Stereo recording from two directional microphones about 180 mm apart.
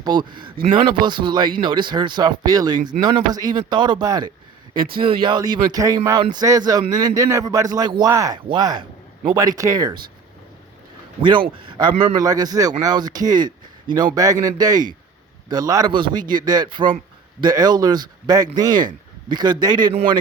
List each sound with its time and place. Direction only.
0.0 s speech: 25° right (ahead or behind)
11.2 s speech: 25° right (ahead or behind)